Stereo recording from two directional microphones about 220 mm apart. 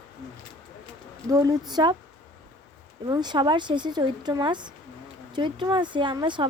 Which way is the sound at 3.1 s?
20° right (ahead or behind).